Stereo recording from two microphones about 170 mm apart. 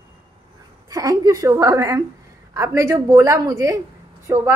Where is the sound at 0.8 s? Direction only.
20° right (ahead or behind).